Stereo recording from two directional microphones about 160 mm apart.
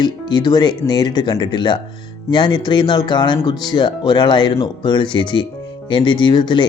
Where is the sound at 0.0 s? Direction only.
25° left (ahead or behind).